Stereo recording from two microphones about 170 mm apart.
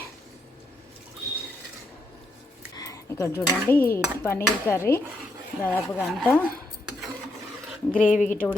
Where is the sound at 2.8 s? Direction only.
20° left (ahead or behind).